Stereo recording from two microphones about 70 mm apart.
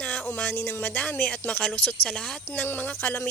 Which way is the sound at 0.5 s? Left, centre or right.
Left.